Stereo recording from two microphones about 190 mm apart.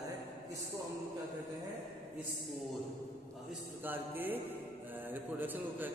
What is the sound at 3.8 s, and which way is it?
A man's voice, 10° right (ahead or behind).